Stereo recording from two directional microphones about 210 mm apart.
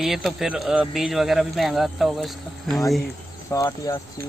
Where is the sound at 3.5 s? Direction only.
15° left (ahead or behind).